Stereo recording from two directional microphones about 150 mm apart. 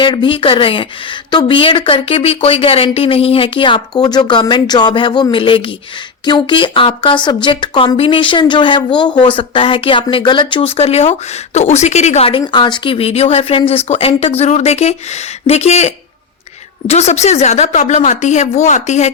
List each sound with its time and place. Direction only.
0.0 s speech: 35° left (ahead or behind)
12.4 s a woman's voice: 30° left (ahead or behind); by 19.1 s 50° left (ahead or behind)